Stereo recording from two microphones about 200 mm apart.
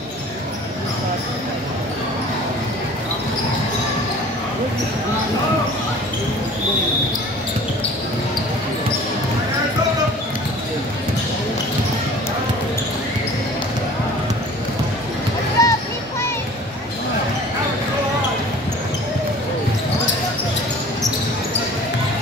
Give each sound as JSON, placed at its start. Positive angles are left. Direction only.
{"t": 15.6, "sound": "music", "side_deg": 15}